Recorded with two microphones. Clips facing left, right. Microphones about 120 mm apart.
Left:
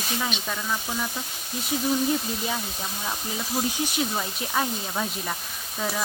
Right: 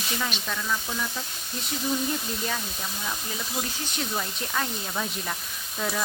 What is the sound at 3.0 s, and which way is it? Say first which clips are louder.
Speech: left 3 dB; 20° left (ahead or behind).